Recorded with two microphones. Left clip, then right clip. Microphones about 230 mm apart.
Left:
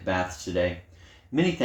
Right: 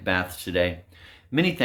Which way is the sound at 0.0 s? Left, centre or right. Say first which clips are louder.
Right 2 dB; right.